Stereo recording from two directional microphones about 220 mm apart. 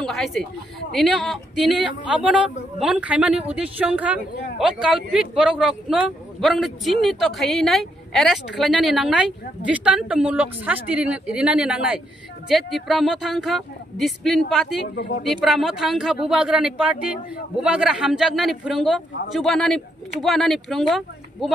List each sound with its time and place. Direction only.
0.0 s speech: centre (ahead or behind)
15.0 s speech: 50° left (ahead or behind)
15.2 s speech: centre (ahead or behind)